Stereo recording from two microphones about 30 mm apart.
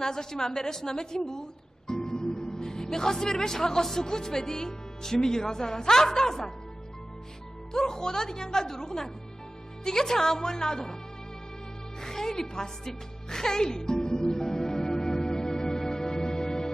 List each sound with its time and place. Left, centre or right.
0.0 s speech: centre
0.8 s music: left
3.8 s speech: centre
7.7 s speech: left
12.0 s music: centre